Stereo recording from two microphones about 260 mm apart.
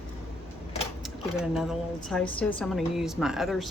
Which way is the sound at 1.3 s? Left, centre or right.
Centre.